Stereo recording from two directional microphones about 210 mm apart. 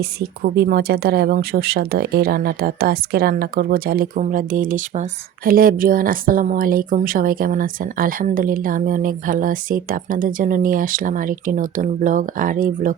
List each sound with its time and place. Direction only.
0.0 s speech: 50° right (ahead or behind)